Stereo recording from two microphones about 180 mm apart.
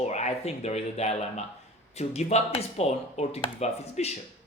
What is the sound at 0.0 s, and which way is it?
Speech, 40° left (ahead or behind).